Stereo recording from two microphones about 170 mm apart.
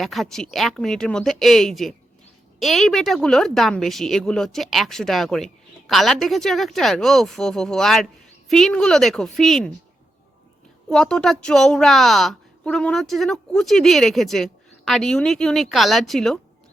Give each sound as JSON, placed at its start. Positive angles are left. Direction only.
{"t": 0.0, "sound": "a woman's voice", "side_deg": 0}
{"t": 10.8, "sound": "a woman's voice", "side_deg": 5}